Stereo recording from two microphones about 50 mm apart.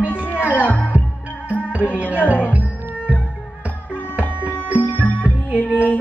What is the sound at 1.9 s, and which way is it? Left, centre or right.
Music, right.